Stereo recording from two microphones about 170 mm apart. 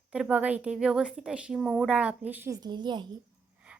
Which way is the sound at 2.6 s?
25° right (ahead or behind).